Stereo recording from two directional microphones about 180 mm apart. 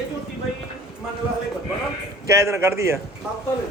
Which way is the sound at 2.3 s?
15° right (ahead or behind).